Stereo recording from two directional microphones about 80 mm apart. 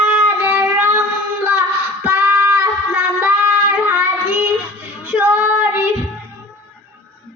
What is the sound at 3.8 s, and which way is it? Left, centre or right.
Child singing, right.